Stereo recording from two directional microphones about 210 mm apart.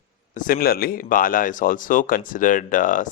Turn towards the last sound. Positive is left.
turn(degrees=40)  # may be behind; listen again after turning